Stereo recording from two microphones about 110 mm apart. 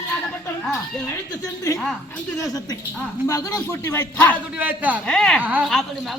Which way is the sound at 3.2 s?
30° left (ahead or behind).